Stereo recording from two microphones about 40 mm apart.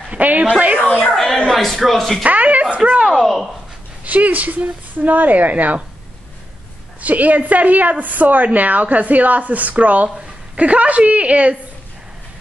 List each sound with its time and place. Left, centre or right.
0.1 s a woman's voice: right
1.1 s a sound: centre
1.5 s a man's voice: centre
2.2 s speech: right
3.2 s a man's voice: centre
4.0 s speech: right
7.0 s speech: right
10.0 s a woman's voice: right